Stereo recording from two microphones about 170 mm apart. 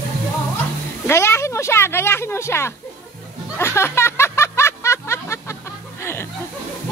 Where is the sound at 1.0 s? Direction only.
15° left (ahead or behind).